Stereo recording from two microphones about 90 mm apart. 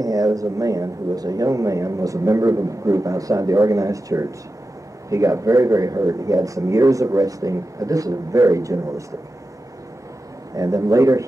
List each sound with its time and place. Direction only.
0.0 s speech: 40° right (ahead or behind)
10.5 s speech: 40° right (ahead or behind)